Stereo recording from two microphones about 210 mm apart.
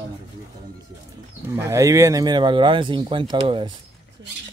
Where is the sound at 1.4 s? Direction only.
15° right (ahead or behind).